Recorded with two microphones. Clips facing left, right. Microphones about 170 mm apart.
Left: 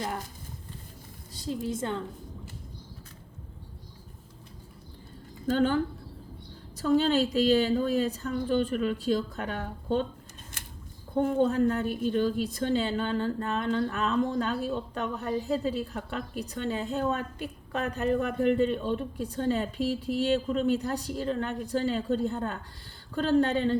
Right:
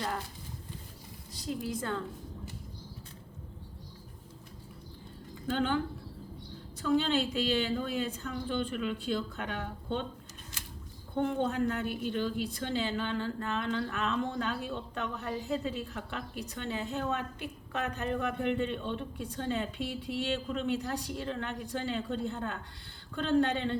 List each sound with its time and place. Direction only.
1.4 s a woman's voice: 30° left (ahead or behind)
5.5 s a woman's voice: 40° left (ahead or behind)
10.6 s scissors: 55° left (ahead or behind)
11.1 s a woman's voice: 40° left (ahead or behind)